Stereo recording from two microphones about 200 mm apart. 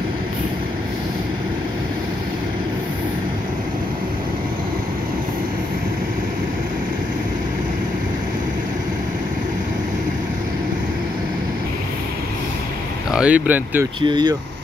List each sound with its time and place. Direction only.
13.1 s speech: 5° right (ahead or behind)
14.0 s speech: 20° right (ahead or behind)